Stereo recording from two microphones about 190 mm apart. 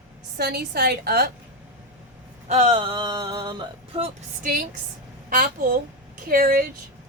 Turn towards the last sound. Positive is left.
turn(degrees=-50)  # may be behind; listen again after turning